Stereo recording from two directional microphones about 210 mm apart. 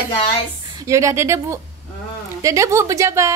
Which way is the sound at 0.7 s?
15° right (ahead or behind).